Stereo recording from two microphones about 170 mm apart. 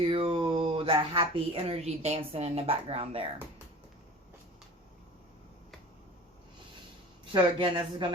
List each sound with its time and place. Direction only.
0.0 s speech: 30° right (ahead or behind)
7.3 s speech: 30° right (ahead or behind)